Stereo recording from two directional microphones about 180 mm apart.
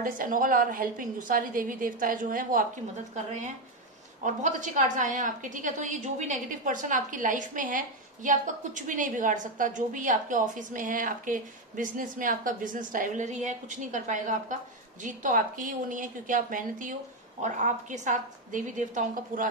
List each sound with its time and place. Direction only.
0.0 s a woman's voice: 50° right (ahead or behind)